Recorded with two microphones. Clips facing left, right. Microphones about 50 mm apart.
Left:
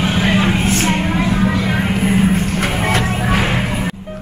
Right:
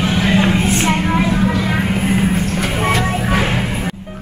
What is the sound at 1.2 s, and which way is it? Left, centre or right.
Music, centre.